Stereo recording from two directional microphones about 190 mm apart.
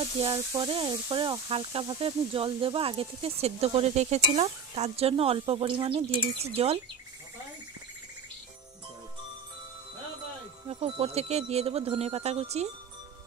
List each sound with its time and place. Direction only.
0.3 s speech: 20° right (ahead or behind)
10.7 s speech: 30° right (ahead or behind)